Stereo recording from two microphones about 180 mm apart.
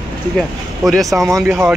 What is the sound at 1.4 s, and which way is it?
Speech, 10° right (ahead or behind).